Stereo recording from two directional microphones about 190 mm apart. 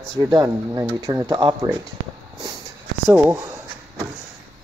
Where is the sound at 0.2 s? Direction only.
20° right (ahead or behind).